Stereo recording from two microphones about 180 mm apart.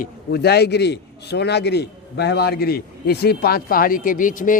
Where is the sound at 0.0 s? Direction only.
65° left (ahead or behind).